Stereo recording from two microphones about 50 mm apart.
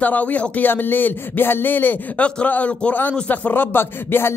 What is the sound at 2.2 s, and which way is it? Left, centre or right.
Speech, left.